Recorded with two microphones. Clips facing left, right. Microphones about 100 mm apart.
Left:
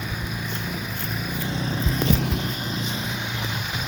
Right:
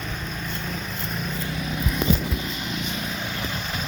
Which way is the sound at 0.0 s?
10° left (ahead or behind).